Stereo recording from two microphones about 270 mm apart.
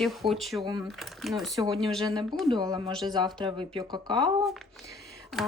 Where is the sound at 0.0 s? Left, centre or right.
Centre.